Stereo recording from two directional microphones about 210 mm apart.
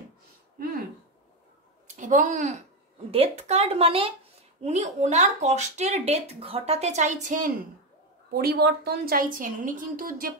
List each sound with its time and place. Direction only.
2.0 s speech: 35° right (ahead or behind)
8.3 s a woman's voice: 50° right (ahead or behind)